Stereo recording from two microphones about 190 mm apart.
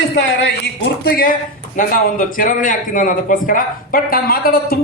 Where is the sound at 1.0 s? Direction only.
50° left (ahead or behind).